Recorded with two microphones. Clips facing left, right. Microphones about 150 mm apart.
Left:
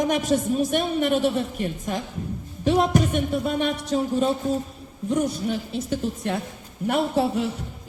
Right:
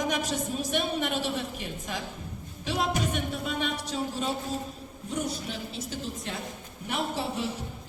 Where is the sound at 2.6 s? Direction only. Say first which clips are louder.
Left 10 dB; 45° left (ahead or behind).